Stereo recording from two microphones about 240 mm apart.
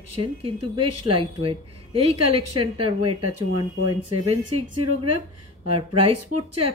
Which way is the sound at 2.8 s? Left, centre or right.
Right.